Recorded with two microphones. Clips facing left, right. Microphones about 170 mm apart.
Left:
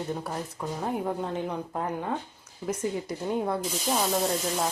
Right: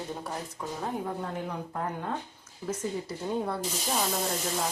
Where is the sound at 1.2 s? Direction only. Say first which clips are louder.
Left 4 dB; 20° left (ahead or behind).